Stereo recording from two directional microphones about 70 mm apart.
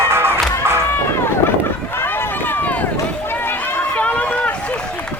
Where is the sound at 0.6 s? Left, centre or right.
Right.